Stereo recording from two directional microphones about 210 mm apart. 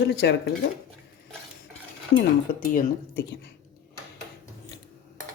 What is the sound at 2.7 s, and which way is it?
Speech, 50° left (ahead or behind).